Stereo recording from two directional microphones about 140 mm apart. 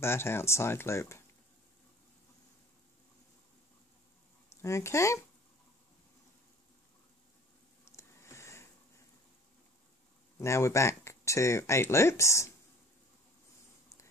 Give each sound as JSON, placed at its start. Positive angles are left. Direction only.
{"t": 0.0, "sound": "speech", "side_deg": 20}
{"t": 4.5, "sound": "speech", "side_deg": 20}
{"t": 7.9, "sound": "a sound", "side_deg": 20}
{"t": 10.4, "sound": "speech", "side_deg": 20}